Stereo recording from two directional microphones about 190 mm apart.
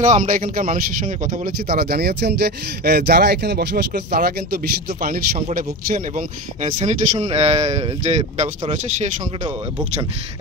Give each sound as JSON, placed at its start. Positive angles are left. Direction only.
{"t": 0.0, "sound": "speech", "side_deg": -40}